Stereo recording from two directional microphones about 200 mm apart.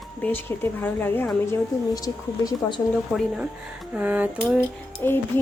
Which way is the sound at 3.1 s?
Centre (ahead or behind).